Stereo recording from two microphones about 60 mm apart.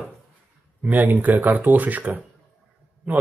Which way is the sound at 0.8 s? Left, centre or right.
Right.